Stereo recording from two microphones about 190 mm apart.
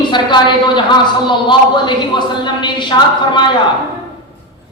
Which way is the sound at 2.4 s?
25° left (ahead or behind).